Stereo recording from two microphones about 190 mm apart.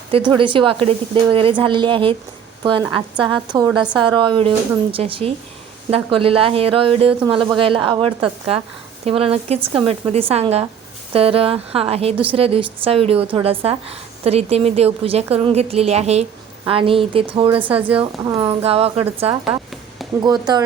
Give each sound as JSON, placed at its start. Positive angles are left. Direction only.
{"t": 0.1, "sound": "a woman's voice", "side_deg": -25}